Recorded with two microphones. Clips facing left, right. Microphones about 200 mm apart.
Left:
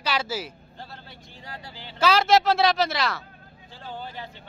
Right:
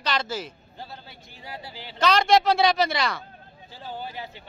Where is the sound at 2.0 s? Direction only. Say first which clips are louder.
Even; 5° left (ahead or behind).